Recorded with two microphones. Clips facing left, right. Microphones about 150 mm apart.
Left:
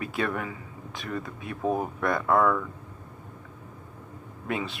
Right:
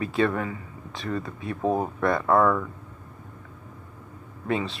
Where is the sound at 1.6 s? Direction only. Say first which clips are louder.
Right 2 dB; 25° right (ahead or behind).